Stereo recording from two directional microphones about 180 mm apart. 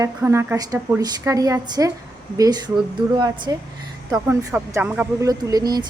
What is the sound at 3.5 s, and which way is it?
A woman's voice, 20° right (ahead or behind).